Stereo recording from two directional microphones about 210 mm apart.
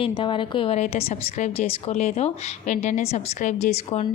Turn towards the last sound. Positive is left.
turn(degrees=30)  # may be behind; listen again after turning